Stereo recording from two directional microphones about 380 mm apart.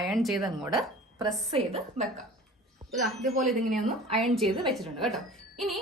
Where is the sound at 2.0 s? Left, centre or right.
Centre.